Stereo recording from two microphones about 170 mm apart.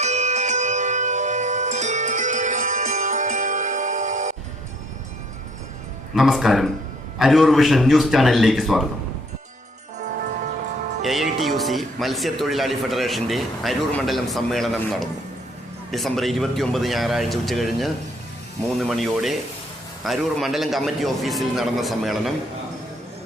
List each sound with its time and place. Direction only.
0.0 s music: 40° right (ahead or behind)
6.1 s speech: centre (ahead or behind)
11.0 s speech: centre (ahead or behind)